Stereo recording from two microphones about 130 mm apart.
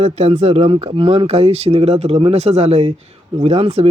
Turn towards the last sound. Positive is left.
turn(degrees=-50)  # may be behind; listen again after turning